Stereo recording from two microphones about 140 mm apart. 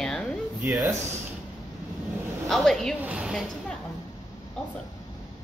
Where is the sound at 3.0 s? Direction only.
10° right (ahead or behind).